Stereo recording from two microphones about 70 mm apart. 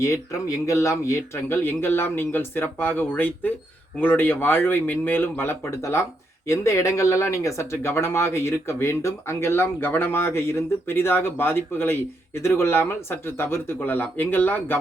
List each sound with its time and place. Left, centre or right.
0.0 s speech: left